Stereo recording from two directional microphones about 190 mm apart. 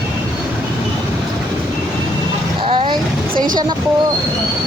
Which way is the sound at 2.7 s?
25° right (ahead or behind).